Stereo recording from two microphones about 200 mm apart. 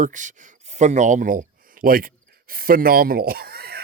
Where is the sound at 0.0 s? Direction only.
40° right (ahead or behind).